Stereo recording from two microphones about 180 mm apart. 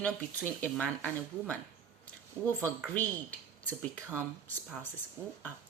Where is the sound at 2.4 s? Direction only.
15° right (ahead or behind).